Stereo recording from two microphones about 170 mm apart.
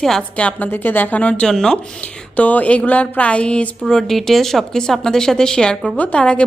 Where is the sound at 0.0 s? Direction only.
5° left (ahead or behind).